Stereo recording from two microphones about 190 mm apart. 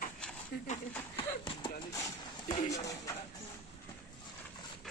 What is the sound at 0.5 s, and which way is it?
Speech, 50° left (ahead or behind).